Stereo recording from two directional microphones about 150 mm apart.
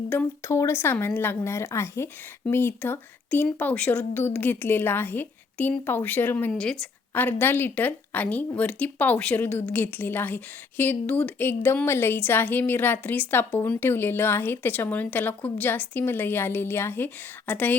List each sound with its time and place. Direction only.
0.1 s speech: 15° left (ahead or behind)